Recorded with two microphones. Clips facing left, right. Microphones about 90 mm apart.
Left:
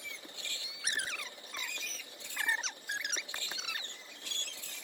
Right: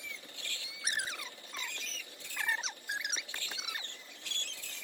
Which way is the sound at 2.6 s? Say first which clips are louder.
Even; 5° right (ahead or behind).